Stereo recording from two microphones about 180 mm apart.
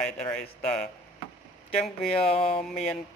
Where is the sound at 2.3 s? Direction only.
30° left (ahead or behind).